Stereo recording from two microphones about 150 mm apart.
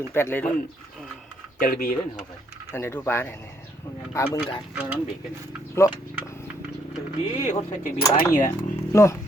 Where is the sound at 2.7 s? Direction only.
15° left (ahead or behind).